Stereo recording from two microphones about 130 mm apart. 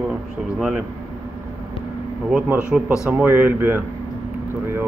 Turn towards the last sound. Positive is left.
turn(degrees=-15)  # may be behind; listen again after turning